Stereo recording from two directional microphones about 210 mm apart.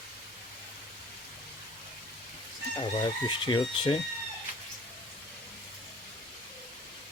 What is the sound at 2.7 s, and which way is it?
Speech, 20° left (ahead or behind).